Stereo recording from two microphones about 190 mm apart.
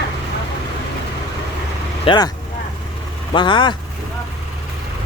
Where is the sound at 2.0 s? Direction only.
20° left (ahead or behind).